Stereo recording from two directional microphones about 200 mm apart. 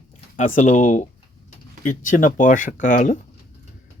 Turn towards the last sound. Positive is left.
turn(degrees=40)  # may be behind; listen again after turning